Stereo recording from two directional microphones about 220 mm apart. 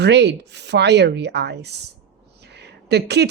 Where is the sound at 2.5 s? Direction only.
50° right (ahead or behind).